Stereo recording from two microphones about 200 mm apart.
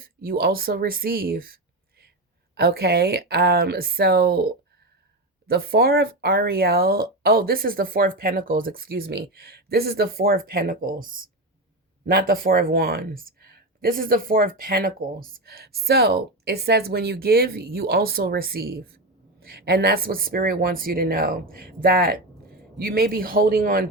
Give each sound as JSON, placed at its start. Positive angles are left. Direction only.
{"t": 0.0, "sound": "speech", "side_deg": -50}
{"t": 5.5, "sound": "speech", "side_deg": -50}